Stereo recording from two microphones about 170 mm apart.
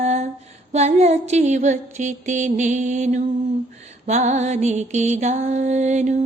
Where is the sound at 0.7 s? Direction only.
40° right (ahead or behind).